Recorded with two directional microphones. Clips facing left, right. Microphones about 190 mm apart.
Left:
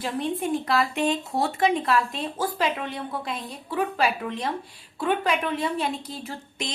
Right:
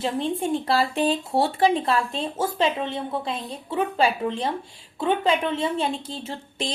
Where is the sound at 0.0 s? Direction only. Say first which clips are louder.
Right 2 dB; 25° right (ahead or behind).